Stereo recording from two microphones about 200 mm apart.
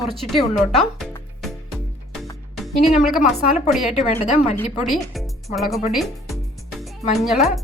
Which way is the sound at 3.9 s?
35° left (ahead or behind).